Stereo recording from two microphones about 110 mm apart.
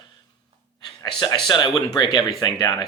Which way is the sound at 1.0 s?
45° left (ahead or behind).